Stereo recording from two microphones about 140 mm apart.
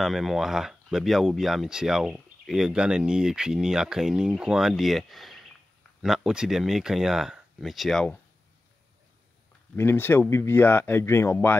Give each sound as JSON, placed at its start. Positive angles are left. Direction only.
{"t": 0.0, "sound": "speech", "side_deg": 0}
{"t": 9.8, "sound": "speech", "side_deg": 15}